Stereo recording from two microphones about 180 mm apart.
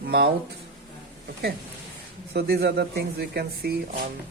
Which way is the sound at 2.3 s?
65° right (ahead or behind).